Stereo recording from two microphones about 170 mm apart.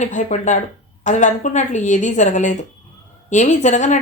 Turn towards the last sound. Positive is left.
turn(degrees=45)  # may be behind; listen again after turning